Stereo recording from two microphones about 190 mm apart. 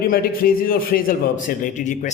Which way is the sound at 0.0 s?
50° left (ahead or behind).